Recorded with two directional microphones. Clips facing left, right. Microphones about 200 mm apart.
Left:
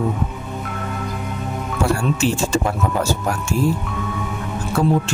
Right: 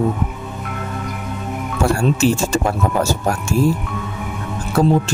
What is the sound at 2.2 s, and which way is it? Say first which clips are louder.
Speech: right 3 dB; 40° right (ahead or behind).